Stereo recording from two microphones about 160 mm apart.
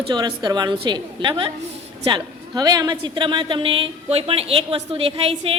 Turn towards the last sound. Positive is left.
turn(degrees=-40)  # may be behind; listen again after turning